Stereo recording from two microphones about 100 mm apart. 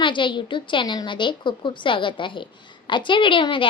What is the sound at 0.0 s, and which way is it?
A woman's voice, 55° left (ahead or behind).